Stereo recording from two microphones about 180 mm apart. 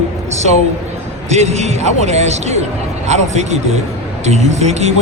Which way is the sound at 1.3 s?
40° right (ahead or behind).